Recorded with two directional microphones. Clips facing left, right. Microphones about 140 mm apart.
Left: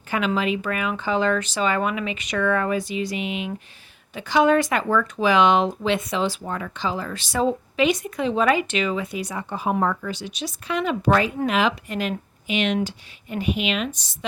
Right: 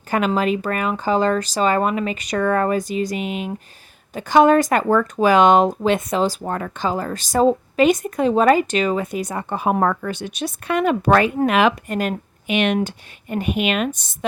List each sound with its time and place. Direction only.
0.1 s speech: 45° right (ahead or behind)